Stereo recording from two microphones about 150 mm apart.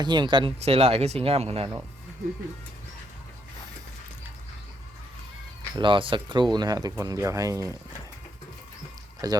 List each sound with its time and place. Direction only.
0.0 s speech: 30° right (ahead or behind)
0.6 s speech: 40° right (ahead or behind)
5.7 s speech: 35° right (ahead or behind)
9.2 s speech: 25° right (ahead or behind)